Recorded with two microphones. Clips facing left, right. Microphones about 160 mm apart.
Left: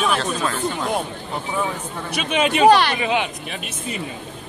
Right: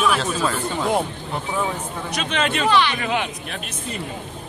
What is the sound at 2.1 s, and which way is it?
Speech, 10° left (ahead or behind).